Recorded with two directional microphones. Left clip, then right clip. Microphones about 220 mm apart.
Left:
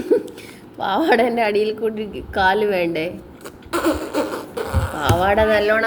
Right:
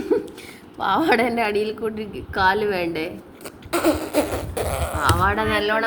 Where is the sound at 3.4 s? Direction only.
30° right (ahead or behind).